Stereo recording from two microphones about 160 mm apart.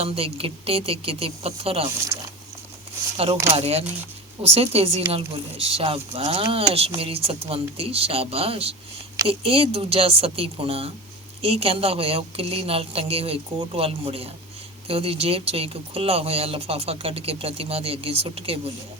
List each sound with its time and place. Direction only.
0.0 s speech: 35° right (ahead or behind)
3.5 s speech: 40° right (ahead or behind)